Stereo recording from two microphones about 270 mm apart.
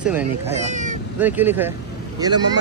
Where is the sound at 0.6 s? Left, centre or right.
Right.